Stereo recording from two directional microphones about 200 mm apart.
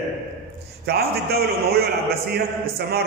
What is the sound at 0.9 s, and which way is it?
A man's voice, 50° right (ahead or behind).